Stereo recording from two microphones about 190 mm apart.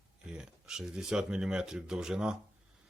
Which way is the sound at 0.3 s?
5° right (ahead or behind).